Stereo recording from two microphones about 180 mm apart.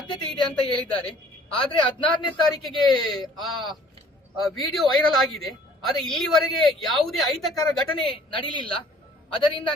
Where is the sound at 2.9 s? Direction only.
25° left (ahead or behind).